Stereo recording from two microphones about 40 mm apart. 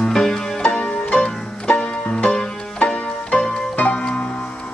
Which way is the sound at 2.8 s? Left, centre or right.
Left.